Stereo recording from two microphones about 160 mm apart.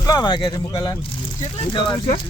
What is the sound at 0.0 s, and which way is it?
Speech, 25° left (ahead or behind).